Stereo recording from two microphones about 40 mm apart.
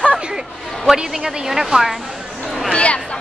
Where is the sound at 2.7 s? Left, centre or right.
Left.